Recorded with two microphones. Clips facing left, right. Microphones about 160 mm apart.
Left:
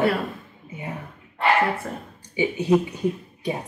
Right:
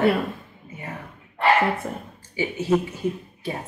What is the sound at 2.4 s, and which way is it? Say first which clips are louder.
Speech: left 2 dB; 15° left (ahead or behind).